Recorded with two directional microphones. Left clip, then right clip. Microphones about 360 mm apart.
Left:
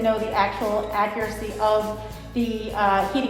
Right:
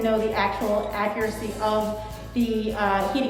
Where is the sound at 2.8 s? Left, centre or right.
Centre.